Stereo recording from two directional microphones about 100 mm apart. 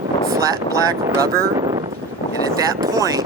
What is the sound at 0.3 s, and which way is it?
Speech, 35° right (ahead or behind).